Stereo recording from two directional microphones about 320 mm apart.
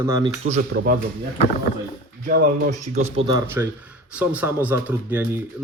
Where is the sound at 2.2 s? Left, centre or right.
Right.